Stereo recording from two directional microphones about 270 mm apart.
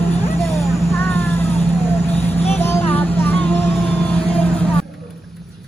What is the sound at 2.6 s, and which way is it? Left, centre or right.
Music, centre.